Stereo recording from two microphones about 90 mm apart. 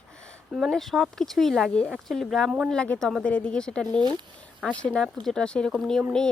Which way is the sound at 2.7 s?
10° left (ahead or behind).